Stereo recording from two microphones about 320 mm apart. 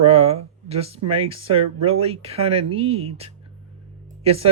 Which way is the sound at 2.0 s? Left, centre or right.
Centre.